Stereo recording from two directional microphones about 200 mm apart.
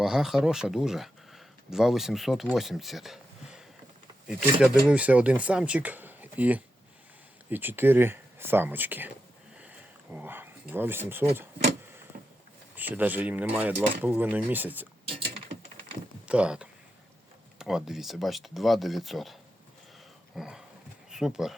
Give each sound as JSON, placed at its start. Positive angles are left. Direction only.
{"t": 0.0, "sound": "speech", "side_deg": 0}
{"t": 4.9, "sound": "speech", "side_deg": -5}
{"t": 12.7, "sound": "speech", "side_deg": -10}
{"t": 15.0, "sound": "mechanisms", "side_deg": -30}
{"t": 16.2, "sound": "speech", "side_deg": -5}
{"t": 20.3, "sound": "dog", "side_deg": 0}
{"t": 21.1, "sound": "speech", "side_deg": -5}